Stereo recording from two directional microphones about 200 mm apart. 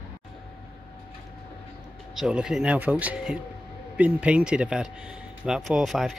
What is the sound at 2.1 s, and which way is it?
Speech, 5° right (ahead or behind).